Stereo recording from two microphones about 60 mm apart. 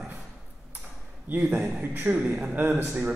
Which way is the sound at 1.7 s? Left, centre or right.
Right.